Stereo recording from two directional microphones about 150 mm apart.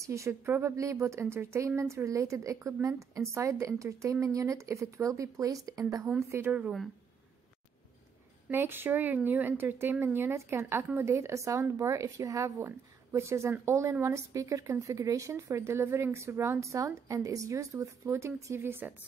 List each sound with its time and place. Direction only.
0.0 s speech: 20° right (ahead or behind)
6.3 s speech: 10° right (ahead or behind)
8.5 s speech: 15° right (ahead or behind)